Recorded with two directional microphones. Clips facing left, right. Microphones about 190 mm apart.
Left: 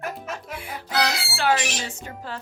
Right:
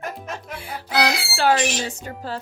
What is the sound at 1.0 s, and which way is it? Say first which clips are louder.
Speech: right 4 dB; 40° right (ahead or behind).